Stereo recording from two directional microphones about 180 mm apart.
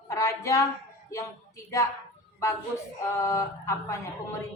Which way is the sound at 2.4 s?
15° left (ahead or behind).